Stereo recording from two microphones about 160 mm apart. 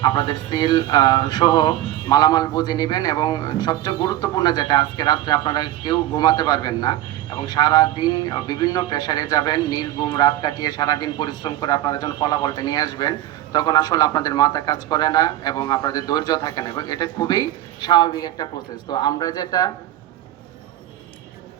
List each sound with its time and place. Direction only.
0.0 s a man's voice: 25° left (ahead or behind)